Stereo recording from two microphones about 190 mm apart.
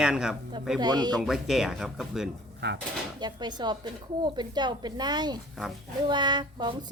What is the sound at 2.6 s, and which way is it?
Speech, 60° right (ahead or behind).